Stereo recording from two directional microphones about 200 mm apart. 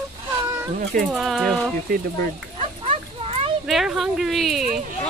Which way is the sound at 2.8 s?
30° right (ahead or behind).